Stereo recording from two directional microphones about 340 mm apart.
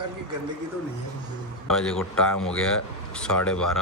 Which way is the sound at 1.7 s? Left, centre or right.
Centre.